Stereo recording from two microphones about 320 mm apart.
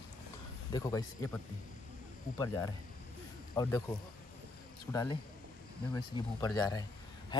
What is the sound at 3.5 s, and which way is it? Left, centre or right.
Speech, centre.